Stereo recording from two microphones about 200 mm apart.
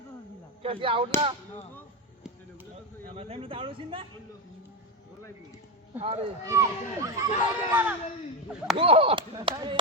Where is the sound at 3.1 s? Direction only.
30° right (ahead or behind).